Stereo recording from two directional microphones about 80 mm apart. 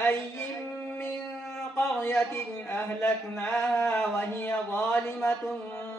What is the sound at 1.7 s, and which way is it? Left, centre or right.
A man's voice, left.